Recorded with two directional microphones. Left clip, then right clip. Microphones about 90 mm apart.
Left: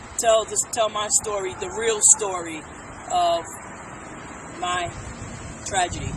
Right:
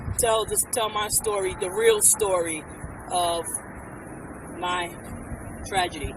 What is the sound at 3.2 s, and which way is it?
Speech, 45° right (ahead or behind).